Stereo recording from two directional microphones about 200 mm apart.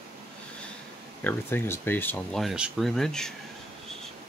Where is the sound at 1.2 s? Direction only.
10° left (ahead or behind).